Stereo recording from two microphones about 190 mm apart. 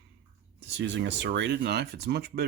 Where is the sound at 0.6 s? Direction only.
70° right (ahead or behind).